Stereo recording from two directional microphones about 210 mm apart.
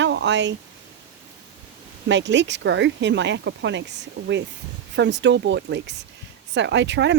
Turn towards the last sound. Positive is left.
turn(degrees=-55)  # may be behind; listen again after turning